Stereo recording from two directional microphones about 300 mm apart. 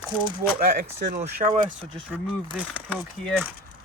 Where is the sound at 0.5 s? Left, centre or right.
Right.